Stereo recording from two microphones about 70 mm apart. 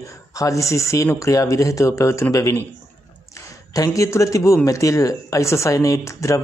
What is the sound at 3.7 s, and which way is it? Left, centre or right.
A man's voice, left.